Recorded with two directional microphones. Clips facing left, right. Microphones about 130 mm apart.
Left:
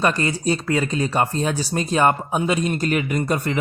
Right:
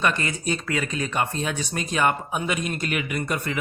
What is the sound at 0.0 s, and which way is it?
Speech, 35° left (ahead or behind).